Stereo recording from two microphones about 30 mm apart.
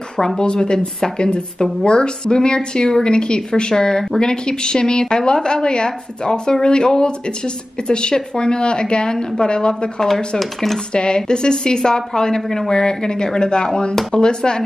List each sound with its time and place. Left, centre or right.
0.4 s a woman's voice: left
10.0 s speech: centre
10.9 s a woman's voice: left; by 12.7 s centre
12.7 s a woman's voice: left